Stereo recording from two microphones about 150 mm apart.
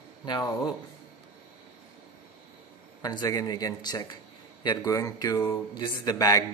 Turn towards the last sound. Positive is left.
turn(degrees=25)  # may be behind; listen again after turning